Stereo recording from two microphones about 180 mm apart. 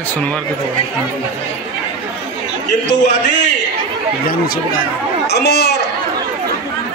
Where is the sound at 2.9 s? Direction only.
70° left (ahead or behind).